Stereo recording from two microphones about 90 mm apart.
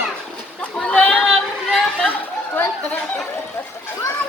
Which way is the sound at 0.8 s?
10° left (ahead or behind).